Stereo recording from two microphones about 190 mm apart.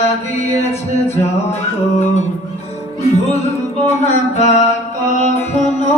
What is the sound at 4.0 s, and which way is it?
Mantra, 35° left (ahead or behind).